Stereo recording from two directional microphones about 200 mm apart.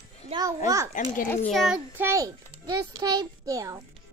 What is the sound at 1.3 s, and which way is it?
A child's voice, centre (ahead or behind).